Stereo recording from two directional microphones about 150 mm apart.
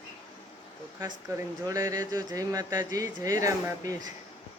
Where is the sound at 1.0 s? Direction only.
20° right (ahead or behind).